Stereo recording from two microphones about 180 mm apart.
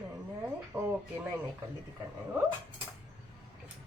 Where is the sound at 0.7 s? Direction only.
10° right (ahead or behind).